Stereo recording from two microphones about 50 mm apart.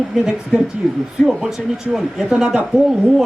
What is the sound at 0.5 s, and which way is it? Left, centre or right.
Speech, centre.